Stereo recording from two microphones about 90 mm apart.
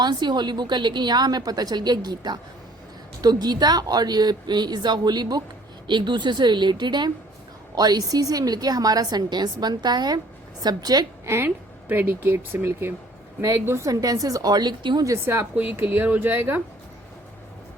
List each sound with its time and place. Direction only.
0.0 s a woman's voice: 55° right (ahead or behind)
11.3 s speech: 25° right (ahead or behind); by 15.0 s 55° right (ahead or behind)
15.0 s speech: 30° right (ahead or behind)